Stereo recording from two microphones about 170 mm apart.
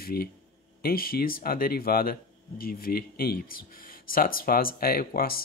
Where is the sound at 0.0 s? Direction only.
65° left (ahead or behind).